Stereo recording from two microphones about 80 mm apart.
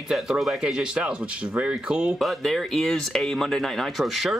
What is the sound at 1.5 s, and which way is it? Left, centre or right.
Speech, centre.